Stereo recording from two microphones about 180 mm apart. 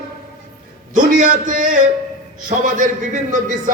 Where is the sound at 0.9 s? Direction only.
45° right (ahead or behind).